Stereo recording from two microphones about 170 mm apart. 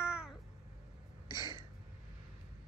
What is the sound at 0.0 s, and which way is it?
Cat, 5° right (ahead or behind).